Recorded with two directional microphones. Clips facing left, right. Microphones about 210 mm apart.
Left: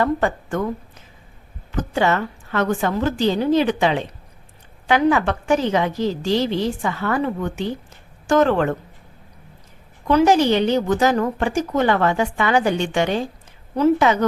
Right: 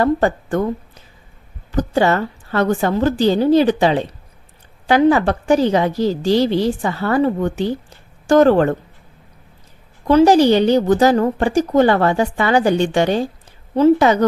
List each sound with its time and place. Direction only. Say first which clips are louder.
0.0 s a woman's voice: right 4 dB; 35° right (ahead or behind)
1.7 s a woman's voice: right 4 dB; 35° right (ahead or behind)
10.1 s a woman's voice: right 4 dB; 30° right (ahead or behind)